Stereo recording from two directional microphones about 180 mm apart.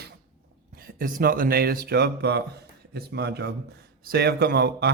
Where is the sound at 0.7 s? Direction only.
55° right (ahead or behind).